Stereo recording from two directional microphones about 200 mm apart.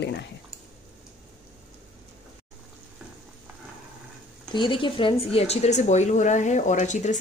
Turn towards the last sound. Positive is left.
turn(degrees=35)  # may be behind; listen again after turning